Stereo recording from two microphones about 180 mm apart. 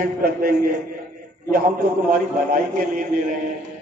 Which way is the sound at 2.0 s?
50° right (ahead or behind).